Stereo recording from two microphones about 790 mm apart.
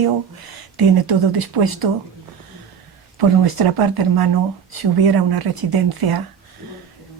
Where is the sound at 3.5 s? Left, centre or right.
Right.